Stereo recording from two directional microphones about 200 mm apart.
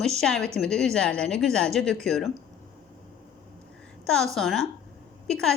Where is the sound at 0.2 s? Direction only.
5° left (ahead or behind).